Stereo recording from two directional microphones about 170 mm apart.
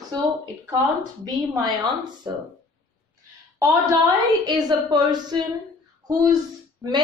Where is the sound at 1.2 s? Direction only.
25° right (ahead or behind).